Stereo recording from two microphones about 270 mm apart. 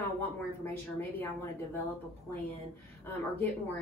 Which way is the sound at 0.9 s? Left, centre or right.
Centre.